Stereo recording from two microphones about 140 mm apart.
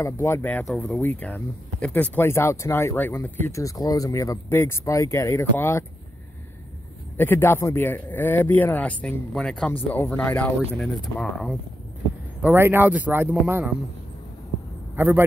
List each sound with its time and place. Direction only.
0.0 s speech: 20° left (ahead or behind)
0.7 s speech: 5° left (ahead or behind); by 5.9 s 20° left (ahead or behind)
7.2 s speech: 15° left (ahead or behind)
12.4 s speech: 15° right (ahead or behind)
15.0 s speech: 15° right (ahead or behind)